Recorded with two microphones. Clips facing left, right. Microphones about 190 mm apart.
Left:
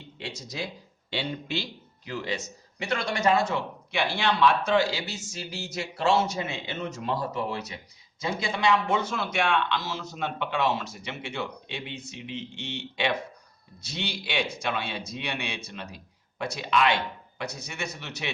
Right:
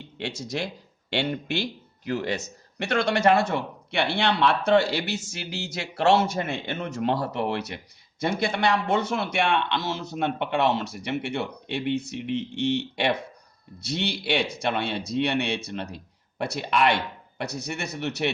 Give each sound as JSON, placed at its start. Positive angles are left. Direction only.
{"t": 0.2, "sound": "speech", "side_deg": -70}
{"t": 2.0, "sound": "speech", "side_deg": -55}
{"t": 2.7, "sound": "speech", "side_deg": -70}